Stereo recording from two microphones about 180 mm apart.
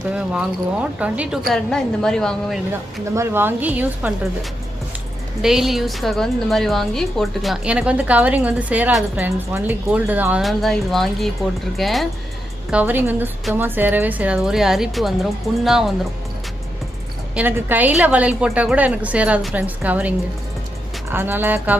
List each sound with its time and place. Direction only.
0.1 s a woman's voice: 5° right (ahead or behind)
3.2 s a woman's voice: 10° right (ahead or behind)
5.4 s a woman's voice: centre (ahead or behind)
12.7 s a woman's voice: 10° right (ahead or behind)
17.3 s a woman's voice: 10° right (ahead or behind)